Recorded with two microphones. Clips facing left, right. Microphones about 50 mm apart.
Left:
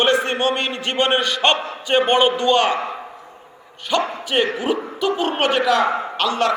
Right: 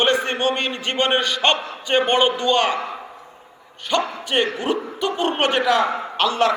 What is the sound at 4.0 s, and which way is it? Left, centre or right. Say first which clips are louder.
Speech: left 1 dB; left.